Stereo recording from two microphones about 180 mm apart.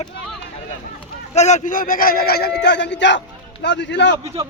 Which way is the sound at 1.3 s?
40° left (ahead or behind).